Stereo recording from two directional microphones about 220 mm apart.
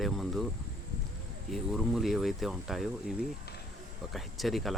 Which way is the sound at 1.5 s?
Centre (ahead or behind).